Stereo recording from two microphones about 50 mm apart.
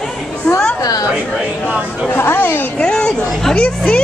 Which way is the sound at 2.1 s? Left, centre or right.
Left.